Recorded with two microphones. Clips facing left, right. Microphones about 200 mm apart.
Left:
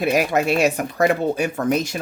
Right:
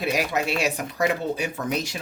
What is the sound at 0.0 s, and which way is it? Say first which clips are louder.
Speech: left 6 dB; 50° left (ahead or behind).